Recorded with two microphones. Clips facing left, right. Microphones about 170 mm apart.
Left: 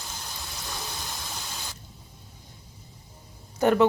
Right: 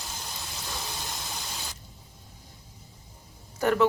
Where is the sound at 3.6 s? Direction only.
25° left (ahead or behind).